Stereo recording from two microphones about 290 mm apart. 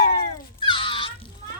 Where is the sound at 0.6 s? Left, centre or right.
Centre.